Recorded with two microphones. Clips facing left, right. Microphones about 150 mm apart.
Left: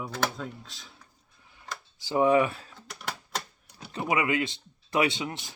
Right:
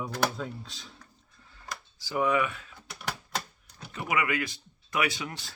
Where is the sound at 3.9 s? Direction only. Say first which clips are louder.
Left 3 dB; 25° left (ahead or behind).